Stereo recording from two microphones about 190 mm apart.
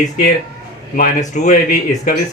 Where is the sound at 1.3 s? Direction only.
40° left (ahead or behind).